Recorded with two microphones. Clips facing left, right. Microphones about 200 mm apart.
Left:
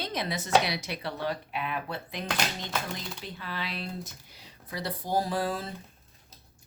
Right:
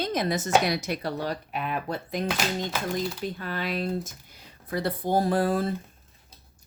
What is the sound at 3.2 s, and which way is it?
Speech, 50° right (ahead or behind).